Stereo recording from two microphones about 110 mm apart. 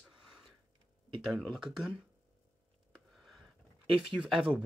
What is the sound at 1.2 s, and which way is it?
Speech, centre (ahead or behind).